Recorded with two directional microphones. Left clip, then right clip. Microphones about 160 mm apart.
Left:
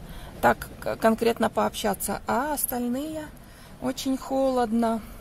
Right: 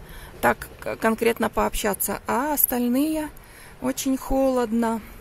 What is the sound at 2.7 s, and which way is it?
Speech, 25° right (ahead or behind).